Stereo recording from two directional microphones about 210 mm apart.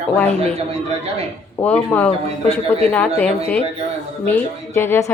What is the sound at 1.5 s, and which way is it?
Speech, 10° left (ahead or behind).